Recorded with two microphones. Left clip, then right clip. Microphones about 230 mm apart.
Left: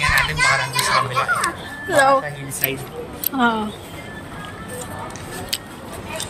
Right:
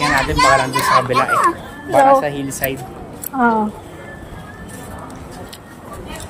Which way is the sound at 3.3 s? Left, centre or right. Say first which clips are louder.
Right 4 dB; centre.